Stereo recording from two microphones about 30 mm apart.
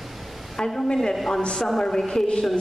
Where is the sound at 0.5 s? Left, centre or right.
Centre.